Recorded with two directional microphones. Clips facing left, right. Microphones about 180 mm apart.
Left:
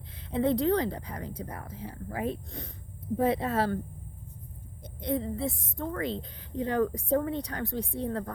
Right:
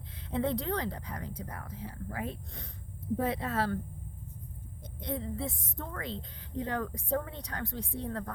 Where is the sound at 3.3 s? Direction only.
25° left (ahead or behind).